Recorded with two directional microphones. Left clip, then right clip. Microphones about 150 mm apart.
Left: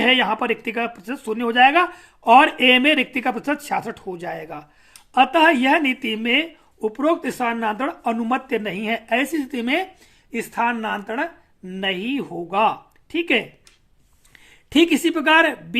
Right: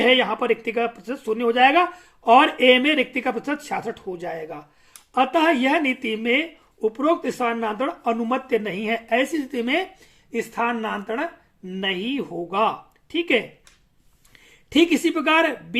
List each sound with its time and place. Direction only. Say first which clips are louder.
0.0 s speech: left 1 dB; 40° left (ahead or behind)
14.7 s speech: left 1 dB; 30° left (ahead or behind)